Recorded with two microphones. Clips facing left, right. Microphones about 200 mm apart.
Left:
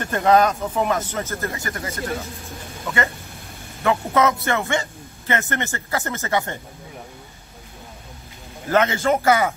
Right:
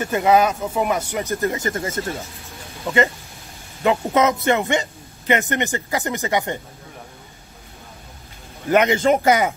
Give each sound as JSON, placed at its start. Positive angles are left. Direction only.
{"t": 0.0, "sound": "a man's voice", "side_deg": -10}
{"t": 8.6, "sound": "speech", "side_deg": -15}